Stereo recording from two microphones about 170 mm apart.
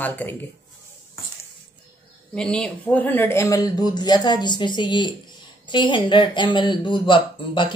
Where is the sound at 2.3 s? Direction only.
5° left (ahead or behind).